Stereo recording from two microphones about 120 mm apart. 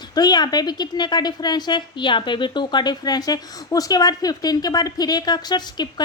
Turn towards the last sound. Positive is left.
turn(degrees=35)  # may be behind; listen again after turning